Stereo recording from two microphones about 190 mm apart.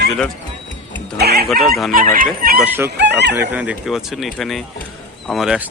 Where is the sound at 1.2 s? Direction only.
55° right (ahead or behind).